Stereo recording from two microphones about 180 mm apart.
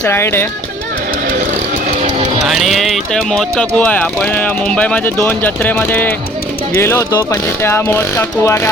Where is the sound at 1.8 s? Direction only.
35° right (ahead or behind).